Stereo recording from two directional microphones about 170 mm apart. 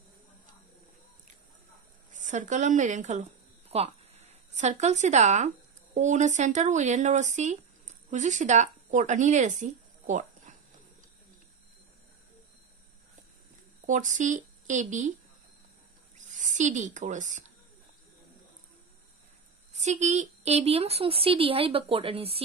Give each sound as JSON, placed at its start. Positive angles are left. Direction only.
{"t": 2.1, "sound": "speech", "side_deg": -45}
{"t": 13.8, "sound": "speech", "side_deg": -50}
{"t": 16.2, "sound": "speech", "side_deg": -45}
{"t": 19.7, "sound": "speech", "side_deg": -40}